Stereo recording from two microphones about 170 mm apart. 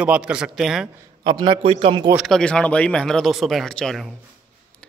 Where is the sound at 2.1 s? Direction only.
Centre (ahead or behind).